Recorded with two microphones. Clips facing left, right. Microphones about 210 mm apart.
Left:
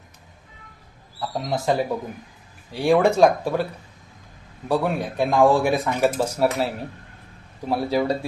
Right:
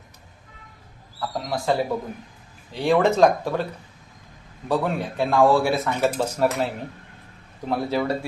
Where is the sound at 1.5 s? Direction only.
20° left (ahead or behind).